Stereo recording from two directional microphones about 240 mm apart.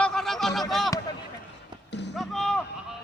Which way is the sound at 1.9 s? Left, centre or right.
Left.